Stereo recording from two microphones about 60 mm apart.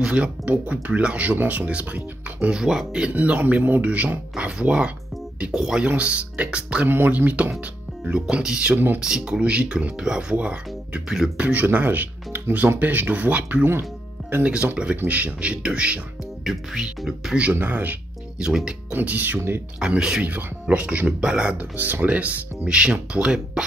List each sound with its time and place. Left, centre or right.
0.0 s speech: right
2.6 s speech: centre
3.1 s speech: right
6.9 s speech: right
8.1 s speech: centre
8.7 s speech: right
9.0 s speech: centre
11.6 s speech: right
16.4 s speech: centre
17.4 s speech: right
18.4 s speech: centre
18.9 s speech: right
20.0 s speech: centre
21.7 s speech: right; by 23.6 s centre